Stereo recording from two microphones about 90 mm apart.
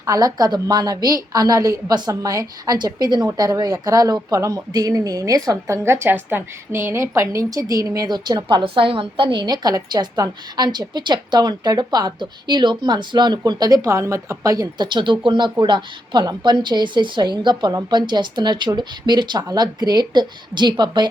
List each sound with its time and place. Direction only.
0.0 s speech: 40° right (ahead or behind)
14.8 s a woman's voice: 60° right (ahead or behind)